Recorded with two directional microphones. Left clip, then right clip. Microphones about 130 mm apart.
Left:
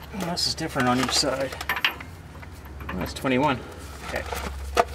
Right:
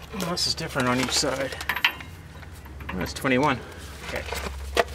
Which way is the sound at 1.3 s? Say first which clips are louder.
Left 1 dB; 25° right (ahead or behind).